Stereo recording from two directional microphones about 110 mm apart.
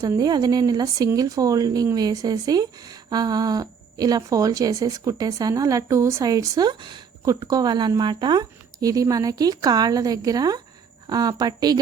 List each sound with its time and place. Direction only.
0.0 s speech: 35° right (ahead or behind)